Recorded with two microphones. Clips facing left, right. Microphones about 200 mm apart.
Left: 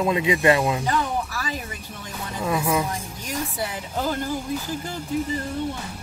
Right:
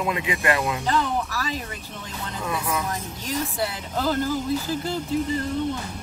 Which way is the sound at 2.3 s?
10° left (ahead or behind).